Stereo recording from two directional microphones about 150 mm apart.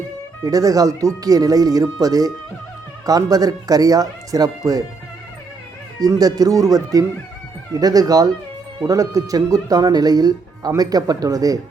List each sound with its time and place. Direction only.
0.4 s speech: 25° right (ahead or behind)
6.0 s speech: 25° right (ahead or behind)